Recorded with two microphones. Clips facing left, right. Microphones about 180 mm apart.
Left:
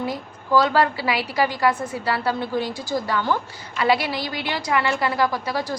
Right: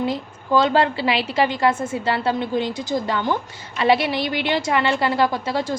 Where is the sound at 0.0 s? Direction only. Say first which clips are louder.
Right 4 dB; 25° right (ahead or behind).